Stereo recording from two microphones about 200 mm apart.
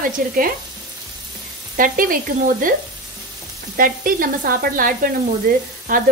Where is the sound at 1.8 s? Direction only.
45° right (ahead or behind).